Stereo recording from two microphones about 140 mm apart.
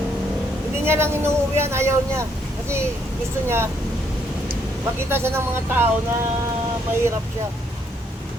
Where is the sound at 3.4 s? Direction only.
20° right (ahead or behind).